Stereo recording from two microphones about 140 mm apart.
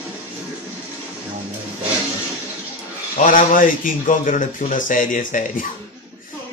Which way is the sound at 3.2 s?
70° left (ahead or behind).